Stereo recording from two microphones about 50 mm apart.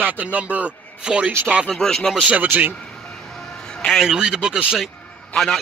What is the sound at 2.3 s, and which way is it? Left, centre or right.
Speech, right.